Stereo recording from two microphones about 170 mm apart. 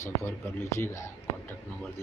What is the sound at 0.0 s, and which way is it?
Speech, 15° left (ahead or behind).